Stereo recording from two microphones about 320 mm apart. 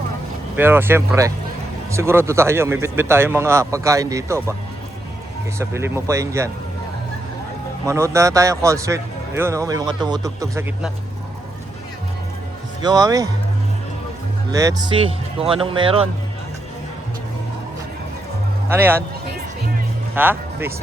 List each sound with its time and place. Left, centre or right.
0.5 s speech: centre
5.5 s speech: centre
7.9 s speech: centre
12.8 s speech: centre
14.5 s speech: centre
18.7 s speech: centre
20.1 s speech: centre